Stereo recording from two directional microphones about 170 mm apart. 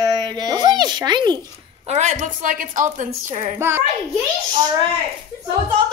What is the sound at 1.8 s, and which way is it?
A woman's voice, 45° right (ahead or behind).